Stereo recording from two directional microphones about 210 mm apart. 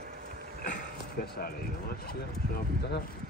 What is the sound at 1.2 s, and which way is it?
Speech, 45° left (ahead or behind).